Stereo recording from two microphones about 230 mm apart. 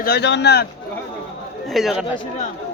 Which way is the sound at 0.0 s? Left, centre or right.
Left.